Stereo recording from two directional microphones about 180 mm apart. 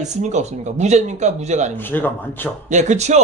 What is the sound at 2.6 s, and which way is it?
Speech, 40° right (ahead or behind).